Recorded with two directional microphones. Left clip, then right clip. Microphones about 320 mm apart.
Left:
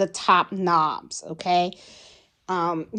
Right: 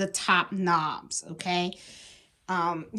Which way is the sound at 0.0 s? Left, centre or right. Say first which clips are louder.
Left 5 dB; centre.